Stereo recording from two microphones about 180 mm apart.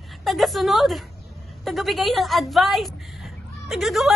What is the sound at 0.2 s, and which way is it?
A woman's voice, centre (ahead or behind).